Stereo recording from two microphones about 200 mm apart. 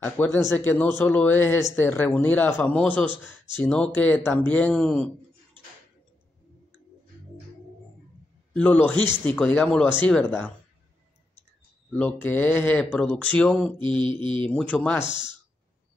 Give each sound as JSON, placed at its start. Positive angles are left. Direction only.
{"t": 0.0, "sound": "speech", "side_deg": 10}
{"t": 8.5, "sound": "speech", "side_deg": 5}
{"t": 11.9, "sound": "speech", "side_deg": 10}
{"t": 13.7, "sound": "mantra", "side_deg": -25}
{"t": 14.4, "sound": "speech", "side_deg": 5}
{"t": 15.0, "sound": "mantra", "side_deg": -20}